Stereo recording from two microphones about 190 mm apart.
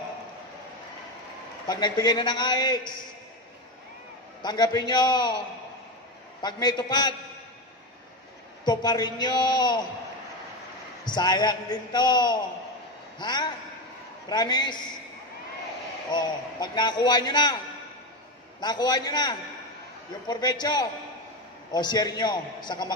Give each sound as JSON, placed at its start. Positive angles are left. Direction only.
{"t": 1.7, "sound": "a man's voice", "side_deg": 20}
{"t": 4.4, "sound": "a man's voice", "side_deg": 20}
{"t": 6.4, "sound": "a man's voice", "side_deg": 20}
{"t": 8.6, "sound": "a man's voice", "side_deg": 20}
{"t": 11.1, "sound": "a man's voice", "side_deg": 20}
{"t": 16.1, "sound": "a man's voice", "side_deg": 20}
{"t": 18.6, "sound": "a man's voice", "side_deg": 20}